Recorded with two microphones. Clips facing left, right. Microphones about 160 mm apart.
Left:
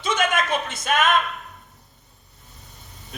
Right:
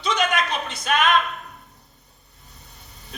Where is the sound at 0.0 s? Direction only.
50° left (ahead or behind).